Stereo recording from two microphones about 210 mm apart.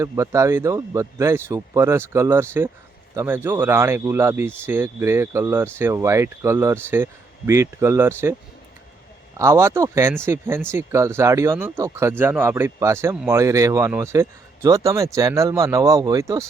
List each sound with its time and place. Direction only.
0.0 s speech: 15° right (ahead or behind)
9.4 s speech: 15° right (ahead or behind)